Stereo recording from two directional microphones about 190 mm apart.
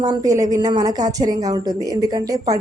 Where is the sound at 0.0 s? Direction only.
20° right (ahead or behind).